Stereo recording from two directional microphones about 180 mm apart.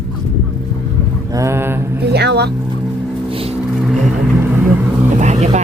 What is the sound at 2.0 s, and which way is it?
Speech, 65° right (ahead or behind).